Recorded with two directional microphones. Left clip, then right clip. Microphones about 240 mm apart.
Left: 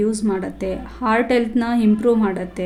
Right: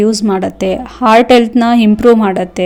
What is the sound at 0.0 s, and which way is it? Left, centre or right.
A woman's voice, right.